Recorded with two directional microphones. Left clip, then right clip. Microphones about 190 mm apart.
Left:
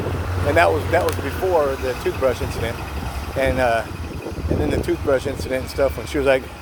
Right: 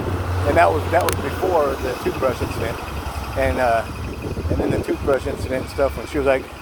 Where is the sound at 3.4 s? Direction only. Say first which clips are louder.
Even; 40° left (ahead or behind).